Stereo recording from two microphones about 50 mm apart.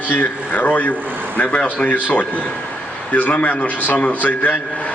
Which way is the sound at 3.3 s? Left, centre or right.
Left.